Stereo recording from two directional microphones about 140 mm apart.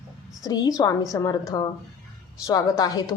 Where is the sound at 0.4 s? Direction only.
25° left (ahead or behind).